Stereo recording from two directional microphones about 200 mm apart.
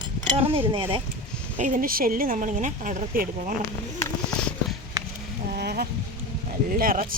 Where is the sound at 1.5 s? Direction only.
40° right (ahead or behind).